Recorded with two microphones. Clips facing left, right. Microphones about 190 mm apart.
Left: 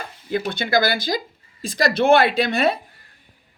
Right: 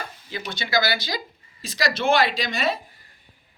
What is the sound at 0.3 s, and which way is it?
A woman's voice, 50° left (ahead or behind).